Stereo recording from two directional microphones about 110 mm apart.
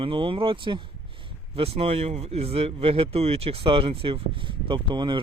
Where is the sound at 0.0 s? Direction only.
55° right (ahead or behind).